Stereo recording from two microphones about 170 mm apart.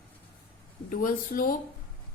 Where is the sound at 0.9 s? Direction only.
55° left (ahead or behind).